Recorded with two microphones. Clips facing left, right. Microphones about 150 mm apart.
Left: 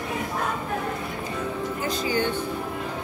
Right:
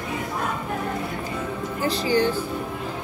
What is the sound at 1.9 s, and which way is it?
Speech, 35° right (ahead or behind).